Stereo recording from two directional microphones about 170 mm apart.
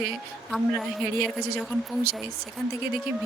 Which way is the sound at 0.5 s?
Centre (ahead or behind).